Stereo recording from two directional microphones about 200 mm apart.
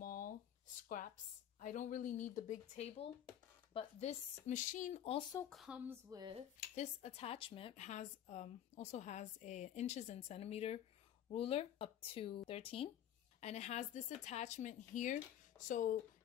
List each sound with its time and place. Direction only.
0.0 s a sound: 45° left (ahead or behind)
1.6 s speech: 40° left (ahead or behind)
5.5 s speech: 5° right (ahead or behind)
6.7 s speech: 35° left (ahead or behind)